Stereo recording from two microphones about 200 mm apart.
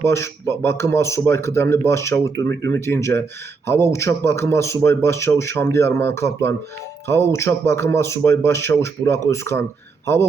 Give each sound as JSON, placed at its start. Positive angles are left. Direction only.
{"t": 0.0, "sound": "a man's voice", "side_deg": 15}